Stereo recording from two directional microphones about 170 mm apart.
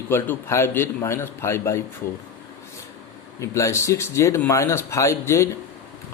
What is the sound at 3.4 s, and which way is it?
Speech, 20° left (ahead or behind).